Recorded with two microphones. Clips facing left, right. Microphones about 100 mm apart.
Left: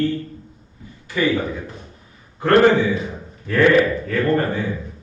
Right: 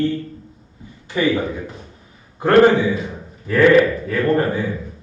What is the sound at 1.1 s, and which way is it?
Speech, 25° right (ahead or behind).